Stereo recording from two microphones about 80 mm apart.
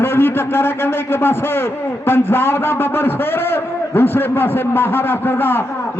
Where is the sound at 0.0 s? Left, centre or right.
Left.